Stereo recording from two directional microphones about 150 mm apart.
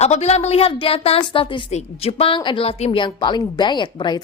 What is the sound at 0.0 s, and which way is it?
A woman's voice, 45° left (ahead or behind).